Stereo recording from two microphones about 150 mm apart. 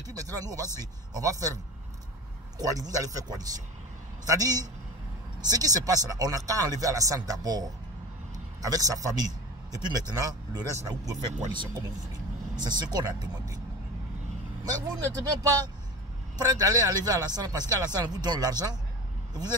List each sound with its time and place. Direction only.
0.0 s a sound: 25° right (ahead or behind)
0.7 s a man's voice: 25° right (ahead or behind)
2.6 s a man's voice: 25° right (ahead or behind)
8.6 s a man's voice: 25° right (ahead or behind)
15.2 s a man's voice: 25° right (ahead or behind)